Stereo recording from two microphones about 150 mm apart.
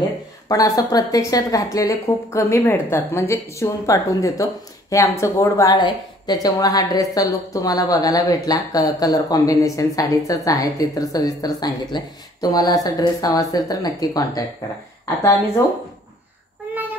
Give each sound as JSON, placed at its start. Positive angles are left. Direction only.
{"t": 0.5, "sound": "a woman's voice", "side_deg": 25}